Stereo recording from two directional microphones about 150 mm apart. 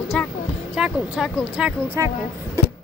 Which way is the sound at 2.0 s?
20° right (ahead or behind).